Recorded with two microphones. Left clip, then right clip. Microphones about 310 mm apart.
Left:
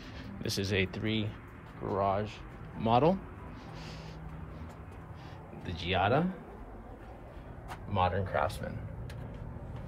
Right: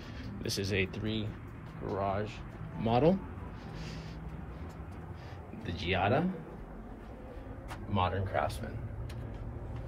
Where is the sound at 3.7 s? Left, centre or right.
Centre.